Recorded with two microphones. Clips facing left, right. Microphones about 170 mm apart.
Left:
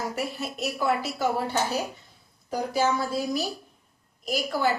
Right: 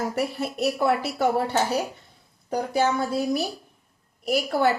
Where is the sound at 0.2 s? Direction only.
60° right (ahead or behind).